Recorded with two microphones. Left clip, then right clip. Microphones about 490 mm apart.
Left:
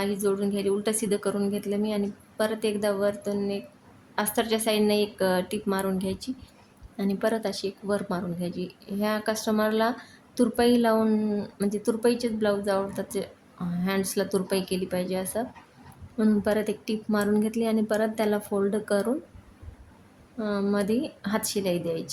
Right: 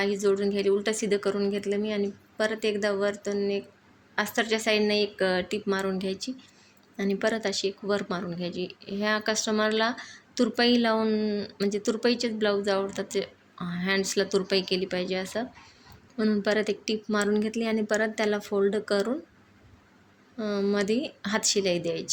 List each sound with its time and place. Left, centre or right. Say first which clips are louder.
0.0 s speech: right 2 dB; left
20.4 s speech: even; left